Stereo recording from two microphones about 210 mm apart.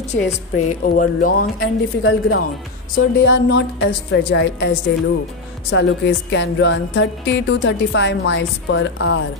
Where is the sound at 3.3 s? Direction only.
60° left (ahead or behind).